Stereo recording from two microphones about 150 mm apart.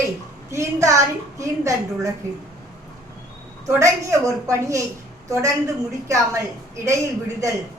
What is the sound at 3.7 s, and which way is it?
A woman's voice, 20° right (ahead or behind).